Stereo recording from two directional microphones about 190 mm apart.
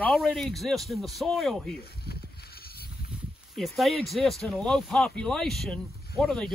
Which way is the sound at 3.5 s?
Centre (ahead or behind).